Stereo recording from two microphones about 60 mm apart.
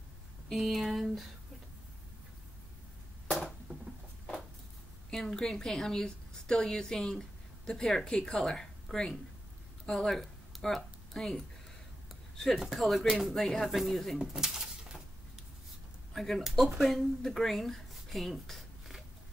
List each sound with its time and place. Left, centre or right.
0.5 s speech: centre
3.7 s a sound: right
5.1 s a woman's voice: centre
12.5 s speech: centre
14.2 s bird: centre
16.1 s speech: centre